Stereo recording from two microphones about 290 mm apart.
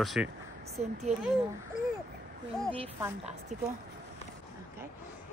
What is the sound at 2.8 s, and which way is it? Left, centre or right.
Speech, centre.